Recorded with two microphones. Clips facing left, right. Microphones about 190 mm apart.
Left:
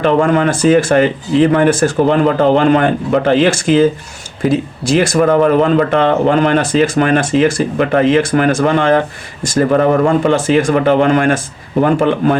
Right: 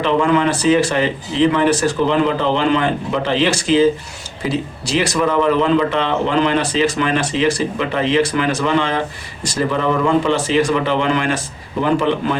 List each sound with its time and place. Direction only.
0.0 s a man's voice: 50° left (ahead or behind)